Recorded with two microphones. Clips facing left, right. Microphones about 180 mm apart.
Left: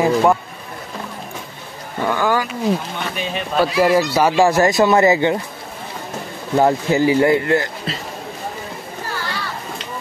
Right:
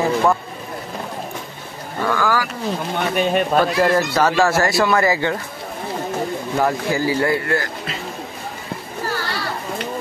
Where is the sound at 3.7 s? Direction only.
10° left (ahead or behind).